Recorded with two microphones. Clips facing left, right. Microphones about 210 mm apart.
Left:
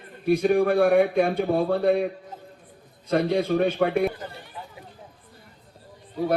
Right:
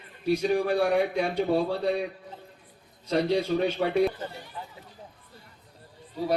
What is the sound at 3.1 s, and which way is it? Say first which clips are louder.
Speech: left 3 dB; 55° left (ahead or behind).